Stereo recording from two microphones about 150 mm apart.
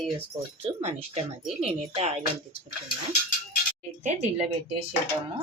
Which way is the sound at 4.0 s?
50° right (ahead or behind).